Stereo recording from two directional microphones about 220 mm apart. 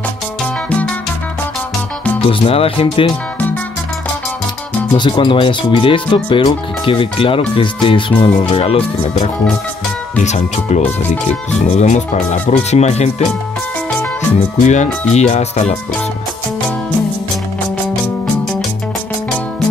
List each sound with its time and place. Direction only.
2.2 s speech: 25° left (ahead or behind)
4.9 s speech: 20° left (ahead or behind)
14.6 s speech: 30° left (ahead or behind)